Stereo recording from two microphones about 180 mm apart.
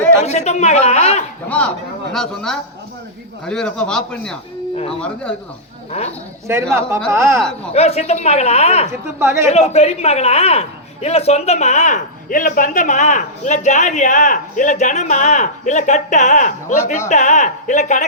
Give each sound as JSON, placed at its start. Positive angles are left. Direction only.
{"t": 0.3, "sound": "a man's voice", "side_deg": 40}
{"t": 1.5, "sound": "speech", "side_deg": 5}
{"t": 6.5, "sound": "a man's voice", "side_deg": -15}
{"t": 7.7, "sound": "a man's voice", "side_deg": 35}
{"t": 9.1, "sound": "a man's voice", "side_deg": -15}
{"t": 9.5, "sound": "a man's voice", "side_deg": 35}